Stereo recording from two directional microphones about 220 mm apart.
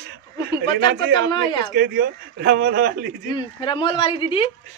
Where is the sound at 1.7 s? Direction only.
50° right (ahead or behind).